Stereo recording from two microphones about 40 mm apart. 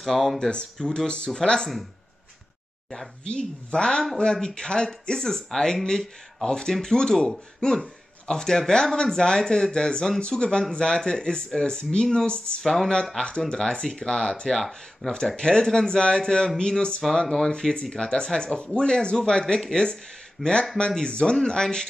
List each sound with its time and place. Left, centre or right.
0.0 s speech: centre
0.4 s speech: left
3.7 s speech: centre
12.6 s speech: centre
13.5 s speech: left
14.7 s speech: centre
15.3 s speech: left
20.4 s speech: centre
20.7 s speech: centre